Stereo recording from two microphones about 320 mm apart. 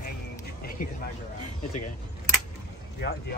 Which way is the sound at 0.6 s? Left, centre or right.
Left.